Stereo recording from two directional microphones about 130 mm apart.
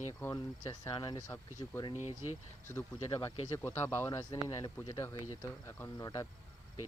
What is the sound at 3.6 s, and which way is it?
Speech, 20° left (ahead or behind).